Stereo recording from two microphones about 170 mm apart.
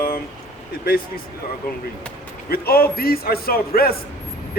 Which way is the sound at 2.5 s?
65° left (ahead or behind).